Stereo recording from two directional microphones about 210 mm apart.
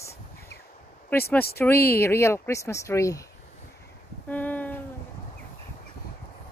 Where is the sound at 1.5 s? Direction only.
10° left (ahead or behind).